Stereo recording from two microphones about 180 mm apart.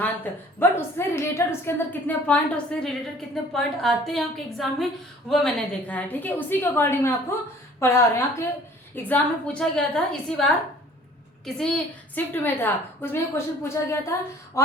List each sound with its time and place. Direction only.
0.6 s a woman's voice: 15° left (ahead or behind)